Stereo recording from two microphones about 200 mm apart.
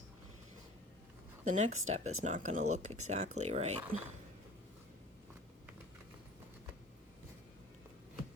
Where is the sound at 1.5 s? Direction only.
35° right (ahead or behind).